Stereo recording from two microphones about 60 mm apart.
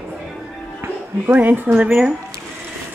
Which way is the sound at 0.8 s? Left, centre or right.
Right.